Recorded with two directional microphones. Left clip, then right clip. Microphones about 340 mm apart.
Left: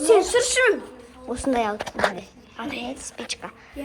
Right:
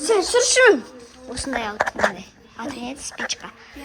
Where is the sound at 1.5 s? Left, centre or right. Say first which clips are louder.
Left 2 dB; centre.